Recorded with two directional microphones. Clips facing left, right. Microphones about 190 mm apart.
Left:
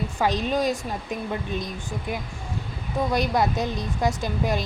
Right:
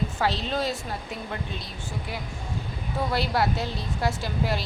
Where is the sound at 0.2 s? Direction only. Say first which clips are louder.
Left 5 dB; 15° left (ahead or behind).